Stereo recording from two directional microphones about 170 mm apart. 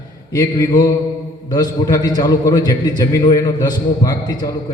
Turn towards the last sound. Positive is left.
turn(degrees=25)  # may be behind; listen again after turning